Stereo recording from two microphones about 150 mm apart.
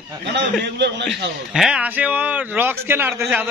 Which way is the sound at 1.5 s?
5° right (ahead or behind).